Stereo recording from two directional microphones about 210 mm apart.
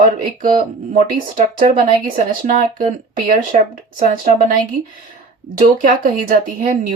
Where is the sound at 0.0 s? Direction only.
40° right (ahead or behind).